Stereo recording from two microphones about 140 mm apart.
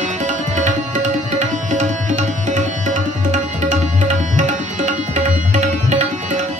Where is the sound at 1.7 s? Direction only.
60° right (ahead or behind).